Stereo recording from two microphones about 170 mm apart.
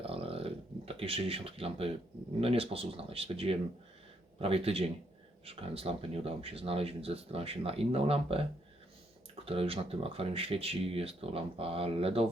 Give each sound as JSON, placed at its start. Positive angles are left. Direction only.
{"t": 0.0, "sound": "a sound", "side_deg": -35}
{"t": 2.4, "sound": "speech", "side_deg": -35}
{"t": 9.5, "sound": "speech", "side_deg": -35}